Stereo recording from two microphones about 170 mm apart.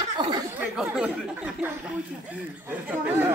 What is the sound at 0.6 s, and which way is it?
Chatter, 5° right (ahead or behind).